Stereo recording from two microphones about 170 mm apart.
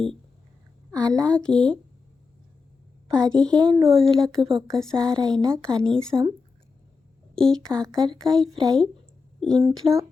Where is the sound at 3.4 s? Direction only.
25° right (ahead or behind).